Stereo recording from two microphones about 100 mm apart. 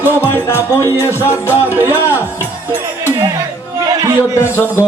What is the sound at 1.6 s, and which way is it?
Music, 20° right (ahead or behind).